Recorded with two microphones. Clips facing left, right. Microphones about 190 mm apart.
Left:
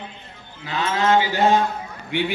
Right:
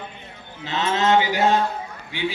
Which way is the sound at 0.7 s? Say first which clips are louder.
Even; 25° right (ahead or behind).